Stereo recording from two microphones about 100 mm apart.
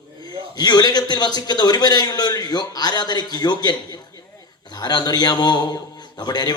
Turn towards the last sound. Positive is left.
turn(degrees=40)  # may be behind; listen again after turning